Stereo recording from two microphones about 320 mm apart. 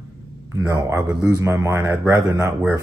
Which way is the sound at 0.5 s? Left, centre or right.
Centre.